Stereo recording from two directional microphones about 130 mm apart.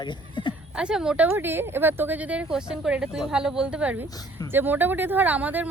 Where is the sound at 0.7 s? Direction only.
5° right (ahead or behind).